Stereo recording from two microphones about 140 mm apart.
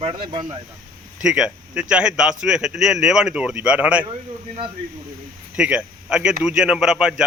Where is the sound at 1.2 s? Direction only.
5° right (ahead or behind).